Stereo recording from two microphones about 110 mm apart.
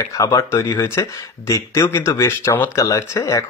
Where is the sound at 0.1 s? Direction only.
30° left (ahead or behind).